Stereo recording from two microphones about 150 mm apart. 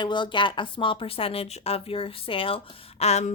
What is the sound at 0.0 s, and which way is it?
Speech, 30° left (ahead or behind).